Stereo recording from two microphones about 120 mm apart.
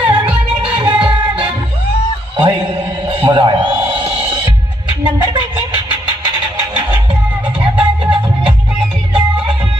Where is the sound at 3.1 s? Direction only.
45° right (ahead or behind).